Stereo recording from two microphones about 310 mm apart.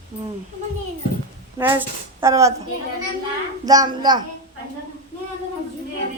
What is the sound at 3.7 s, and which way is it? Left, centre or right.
Speech, centre.